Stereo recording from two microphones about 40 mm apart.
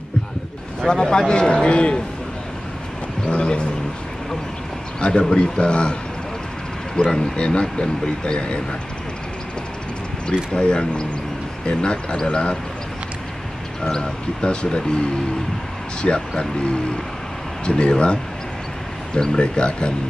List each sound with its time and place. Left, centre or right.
0.8 s speech: left
3.3 s speech: left
5.3 s speech: left
7.1 s speech: centre
10.2 s speech: left
13.8 s speech: centre